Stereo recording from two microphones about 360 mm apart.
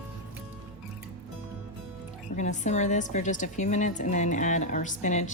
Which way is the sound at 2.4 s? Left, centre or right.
Centre.